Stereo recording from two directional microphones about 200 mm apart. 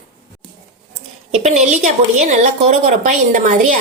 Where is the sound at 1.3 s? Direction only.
35° right (ahead or behind).